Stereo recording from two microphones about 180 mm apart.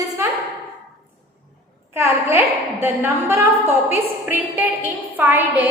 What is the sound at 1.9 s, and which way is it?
A woman's voice, 15° right (ahead or behind).